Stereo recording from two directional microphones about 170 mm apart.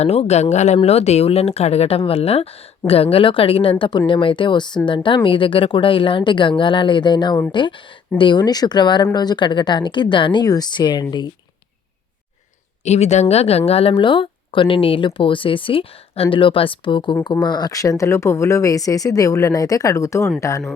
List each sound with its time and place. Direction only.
0.0 s speech: 40° left (ahead or behind)
12.8 s speech: 40° left (ahead or behind); by 20.3 s 15° left (ahead or behind)